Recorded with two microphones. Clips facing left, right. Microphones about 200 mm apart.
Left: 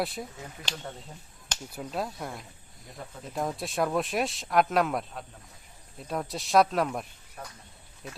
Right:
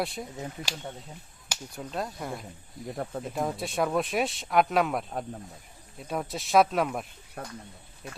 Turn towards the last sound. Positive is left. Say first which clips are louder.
# right 4 dB
turn(degrees=-60)  # may be behind; listen again after turning